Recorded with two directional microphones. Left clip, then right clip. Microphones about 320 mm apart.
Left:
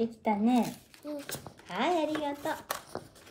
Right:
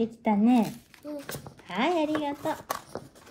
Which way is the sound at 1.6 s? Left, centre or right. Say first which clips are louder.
Right 3 dB; right.